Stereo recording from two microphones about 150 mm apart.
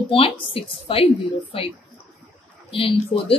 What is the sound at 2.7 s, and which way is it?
Speech, 35° left (ahead or behind).